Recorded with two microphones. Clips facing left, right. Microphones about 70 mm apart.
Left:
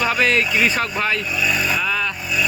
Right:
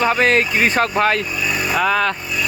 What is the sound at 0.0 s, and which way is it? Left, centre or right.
Speech, right.